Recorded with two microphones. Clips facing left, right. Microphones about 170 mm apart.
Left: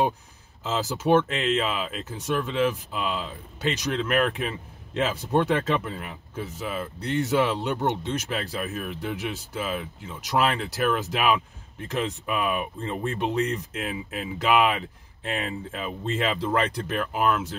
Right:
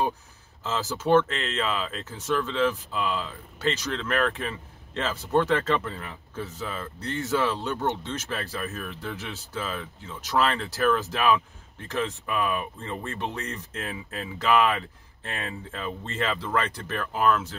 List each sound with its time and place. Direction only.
0.7 s speech: 15° left (ahead or behind)